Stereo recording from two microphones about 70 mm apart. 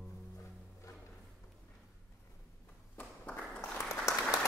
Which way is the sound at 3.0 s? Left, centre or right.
Centre.